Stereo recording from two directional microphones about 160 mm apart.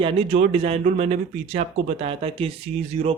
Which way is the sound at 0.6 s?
40° right (ahead or behind).